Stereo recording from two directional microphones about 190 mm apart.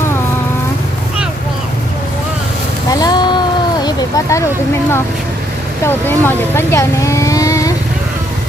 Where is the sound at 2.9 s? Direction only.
20° left (ahead or behind).